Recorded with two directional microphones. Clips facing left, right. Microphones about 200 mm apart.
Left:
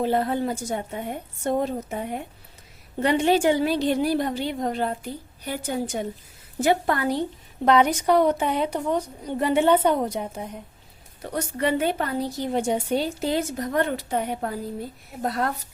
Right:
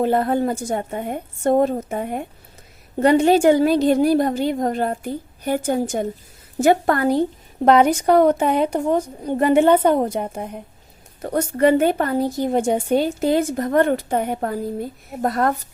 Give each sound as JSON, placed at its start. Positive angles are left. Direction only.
{"t": 0.0, "sound": "a woman's voice", "side_deg": -50}